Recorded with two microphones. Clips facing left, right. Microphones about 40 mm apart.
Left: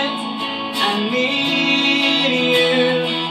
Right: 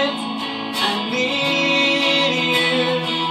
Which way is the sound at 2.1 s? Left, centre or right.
Centre.